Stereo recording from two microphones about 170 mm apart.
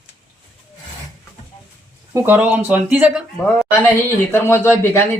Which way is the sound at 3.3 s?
5° left (ahead or behind).